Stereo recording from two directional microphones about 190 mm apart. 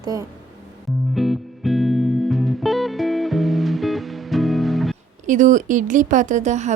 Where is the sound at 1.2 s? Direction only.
Centre (ahead or behind).